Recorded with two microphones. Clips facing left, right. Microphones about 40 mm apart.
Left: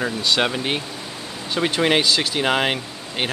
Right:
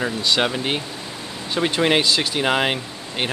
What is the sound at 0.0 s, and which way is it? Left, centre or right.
Speech, centre.